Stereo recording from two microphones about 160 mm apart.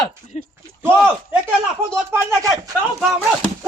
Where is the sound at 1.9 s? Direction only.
15° right (ahead or behind).